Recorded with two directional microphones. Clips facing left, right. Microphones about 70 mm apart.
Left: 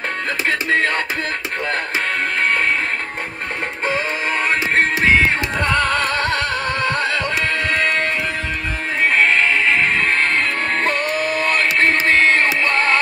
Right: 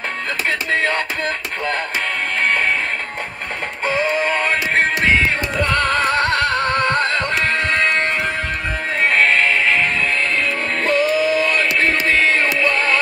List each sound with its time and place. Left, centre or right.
4.2 s synthetic singing: centre
5.8 s music: centre
6.0 s music: right
9.1 s music: centre
9.9 s music: left